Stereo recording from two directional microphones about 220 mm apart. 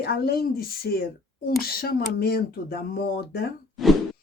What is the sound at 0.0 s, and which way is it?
Speech, 45° left (ahead or behind).